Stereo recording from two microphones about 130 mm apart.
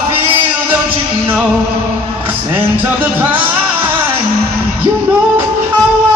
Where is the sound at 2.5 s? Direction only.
15° right (ahead or behind).